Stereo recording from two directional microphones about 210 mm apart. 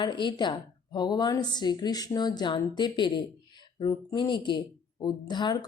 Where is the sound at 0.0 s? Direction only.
20° left (ahead or behind).